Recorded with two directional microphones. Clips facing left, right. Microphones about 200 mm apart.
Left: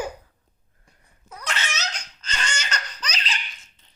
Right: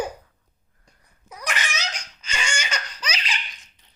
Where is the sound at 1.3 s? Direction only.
10° right (ahead or behind).